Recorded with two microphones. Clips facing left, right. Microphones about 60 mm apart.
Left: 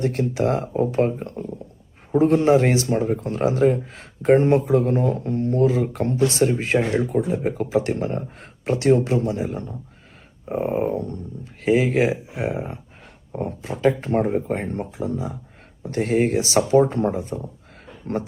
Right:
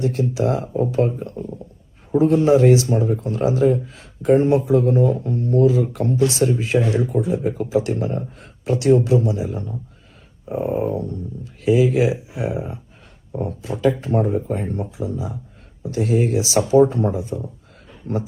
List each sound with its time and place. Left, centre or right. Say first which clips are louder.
0.0 s speech: right 1 dB; left
10.5 s speech: right 1 dB; left
10.8 s speech: right 1 dB; left